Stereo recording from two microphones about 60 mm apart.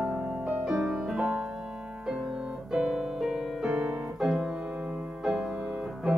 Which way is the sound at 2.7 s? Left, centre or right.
Centre.